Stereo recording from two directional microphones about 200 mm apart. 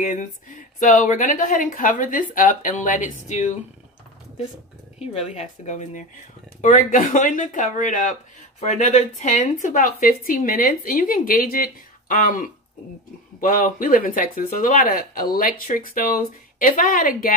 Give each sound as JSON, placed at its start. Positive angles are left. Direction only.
{"t": 0.0, "sound": "speech", "side_deg": 40}
{"t": 4.9, "sound": "speech", "side_deg": 30}